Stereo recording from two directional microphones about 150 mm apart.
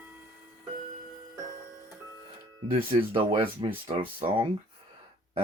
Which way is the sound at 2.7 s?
35° right (ahead or behind).